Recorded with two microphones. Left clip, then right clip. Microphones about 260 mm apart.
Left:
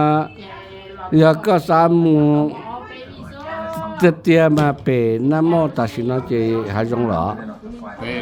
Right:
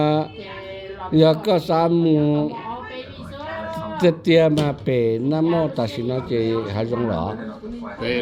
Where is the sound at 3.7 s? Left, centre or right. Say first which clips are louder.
Left 3 dB; left.